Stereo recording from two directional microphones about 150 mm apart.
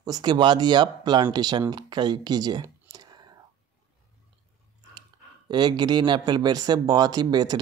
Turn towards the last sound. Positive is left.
turn(degrees=-25)  # may be behind; listen again after turning